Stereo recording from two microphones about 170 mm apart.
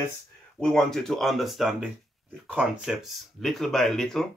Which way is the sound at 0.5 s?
5° left (ahead or behind).